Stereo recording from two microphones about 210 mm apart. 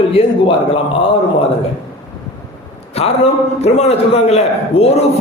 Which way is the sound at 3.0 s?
30° left (ahead or behind).